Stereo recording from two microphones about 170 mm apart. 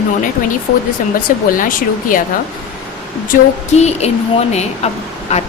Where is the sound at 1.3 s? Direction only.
50° left (ahead or behind).